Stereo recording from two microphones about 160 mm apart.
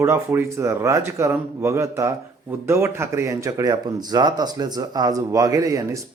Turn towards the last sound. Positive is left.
turn(degrees=-20)  # may be behind; listen again after turning